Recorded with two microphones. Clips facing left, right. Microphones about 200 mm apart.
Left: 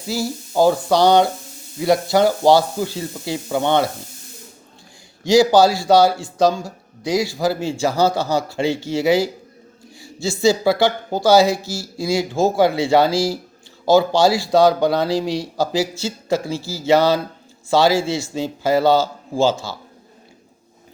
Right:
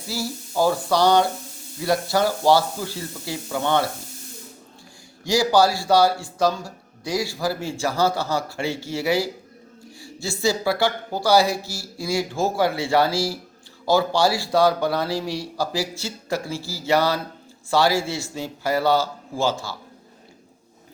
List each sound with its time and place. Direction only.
0.1 s speech: 20° left (ahead or behind)
5.3 s speech: 15° left (ahead or behind)